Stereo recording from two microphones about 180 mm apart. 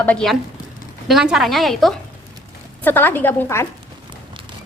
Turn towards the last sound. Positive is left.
turn(degrees=15)  # may be behind; listen again after turning